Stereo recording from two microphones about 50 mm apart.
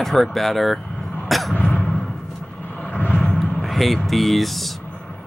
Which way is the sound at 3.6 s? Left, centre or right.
Centre.